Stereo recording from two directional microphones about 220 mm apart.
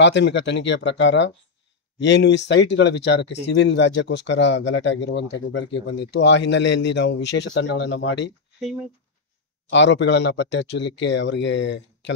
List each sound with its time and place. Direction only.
0.0 s speech: 50° left (ahead or behind)
9.7 s speech: 55° left (ahead or behind)